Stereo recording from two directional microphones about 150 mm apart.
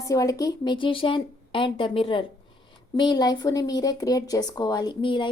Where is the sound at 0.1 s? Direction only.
25° left (ahead or behind).